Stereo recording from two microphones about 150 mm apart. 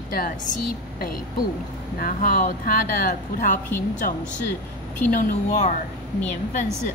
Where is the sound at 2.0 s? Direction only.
75° left (ahead or behind).